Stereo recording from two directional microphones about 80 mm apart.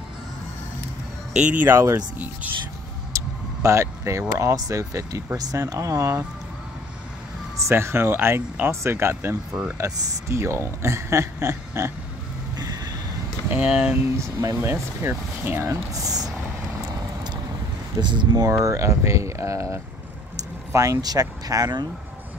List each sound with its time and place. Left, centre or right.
1.3 s speech: centre
2.0 s speech: centre
3.1 s vehicle: right
4.4 s speech: right
7.5 s speech: right
9.5 s speech: centre
9.8 s speech: right
12.5 s vehicle: right
13.6 s speech: centre
13.8 s speech: right
14.6 s speech: right
15.9 s speech: right
17.9 s speech: right
18.4 s speech: right